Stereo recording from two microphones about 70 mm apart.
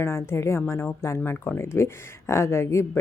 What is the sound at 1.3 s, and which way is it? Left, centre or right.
Speech, left.